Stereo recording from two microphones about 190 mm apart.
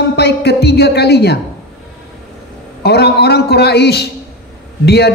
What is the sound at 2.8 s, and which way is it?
A woman's voice, 60° left (ahead or behind).